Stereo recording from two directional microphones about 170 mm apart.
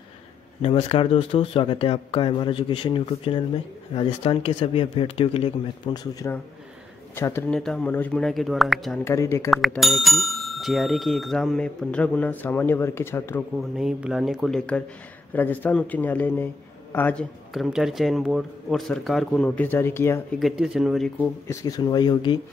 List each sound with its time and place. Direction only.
0.6 s speech: 35° left (ahead or behind)
6.1 s speech: 15° left (ahead or behind)
7.5 s speech: 5° left (ahead or behind)
9.0 s speech: 15° left (ahead or behind)
9.5 s speech: centre (ahead or behind)
13.7 s a man's voice: centre (ahead or behind); by 20.2 s 15° left (ahead or behind)
20.3 s speech: centre (ahead or behind)
21.5 s speech: 20° left (ahead or behind)